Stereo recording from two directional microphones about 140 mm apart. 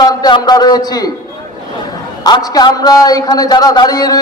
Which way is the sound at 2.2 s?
25° left (ahead or behind).